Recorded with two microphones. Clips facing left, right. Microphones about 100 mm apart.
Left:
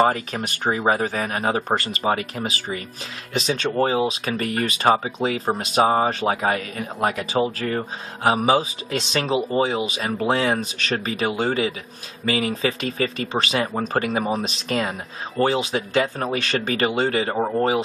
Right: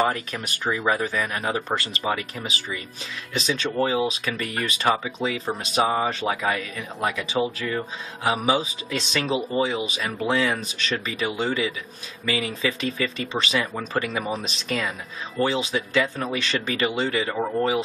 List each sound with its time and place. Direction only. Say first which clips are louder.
0.0 s speech: left 4 dB; 40° left (ahead or behind)